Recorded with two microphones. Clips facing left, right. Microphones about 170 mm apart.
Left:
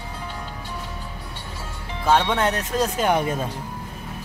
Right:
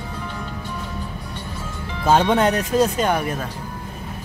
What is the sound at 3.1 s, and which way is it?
Speech, 25° left (ahead or behind).